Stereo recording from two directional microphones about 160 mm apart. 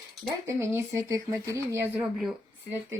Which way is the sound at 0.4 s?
15° right (ahead or behind).